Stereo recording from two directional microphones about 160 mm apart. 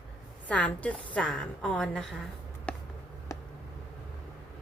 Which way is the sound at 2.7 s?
5° left (ahead or behind).